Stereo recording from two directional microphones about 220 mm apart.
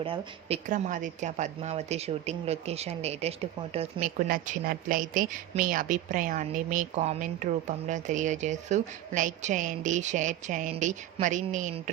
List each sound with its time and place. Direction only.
0.0 s a woman's voice: 25° right (ahead or behind)
4.3 s a woman's voice: 40° right (ahead or behind)